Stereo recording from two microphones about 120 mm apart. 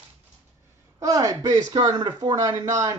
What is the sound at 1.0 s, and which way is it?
Speech, 30° right (ahead or behind).